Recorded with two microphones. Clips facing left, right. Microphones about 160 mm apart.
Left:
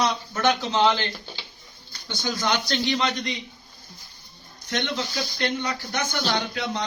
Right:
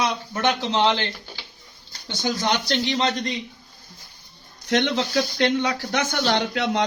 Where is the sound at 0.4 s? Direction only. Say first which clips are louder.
Even; 30° right (ahead or behind).